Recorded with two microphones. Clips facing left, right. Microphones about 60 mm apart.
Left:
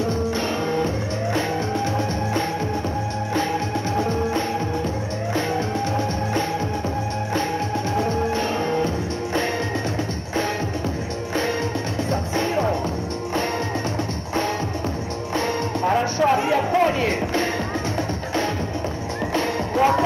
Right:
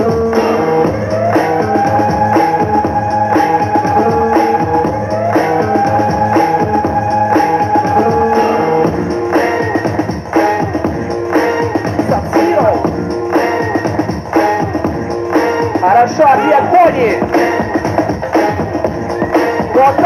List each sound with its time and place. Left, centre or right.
0.0 s music: right
12.1 s music: right
15.3 s music: right